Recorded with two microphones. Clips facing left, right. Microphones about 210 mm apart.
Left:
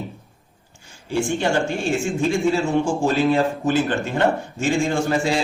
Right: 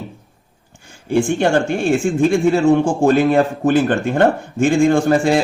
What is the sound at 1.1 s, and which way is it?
Speech, 55° right (ahead or behind).